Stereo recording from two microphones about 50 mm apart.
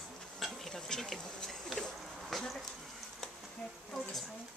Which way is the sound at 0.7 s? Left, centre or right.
Centre.